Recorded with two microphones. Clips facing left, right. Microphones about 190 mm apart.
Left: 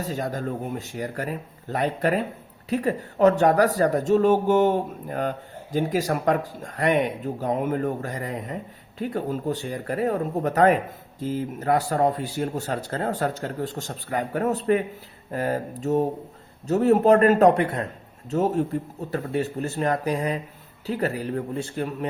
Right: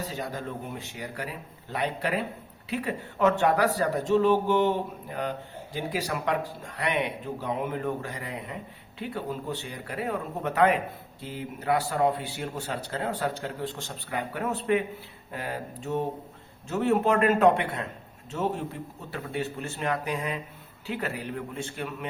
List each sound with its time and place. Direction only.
0.0 s speech: 45° left (ahead or behind)